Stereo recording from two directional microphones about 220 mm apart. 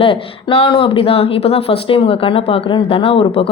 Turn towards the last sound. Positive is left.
turn(degrees=25)  # may be behind; listen again after turning